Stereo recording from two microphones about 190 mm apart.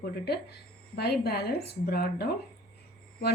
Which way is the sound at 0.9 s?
55° left (ahead or behind).